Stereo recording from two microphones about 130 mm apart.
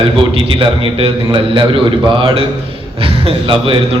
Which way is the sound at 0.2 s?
45° right (ahead or behind).